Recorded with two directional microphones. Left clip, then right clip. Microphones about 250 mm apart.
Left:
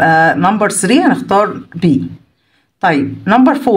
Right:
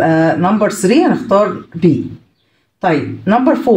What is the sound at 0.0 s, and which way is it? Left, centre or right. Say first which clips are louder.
Speech: left 3 dB; left.